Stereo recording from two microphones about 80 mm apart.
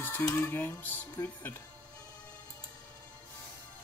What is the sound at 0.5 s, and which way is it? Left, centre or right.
Speech, left.